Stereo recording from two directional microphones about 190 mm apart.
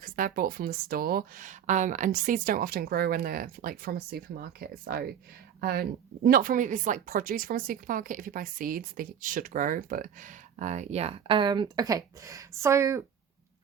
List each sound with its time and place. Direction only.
0.0 s speech: 45° right (ahead or behind); by 13.1 s 15° right (ahead or behind)